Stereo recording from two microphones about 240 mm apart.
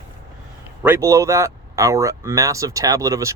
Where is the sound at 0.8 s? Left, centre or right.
Centre.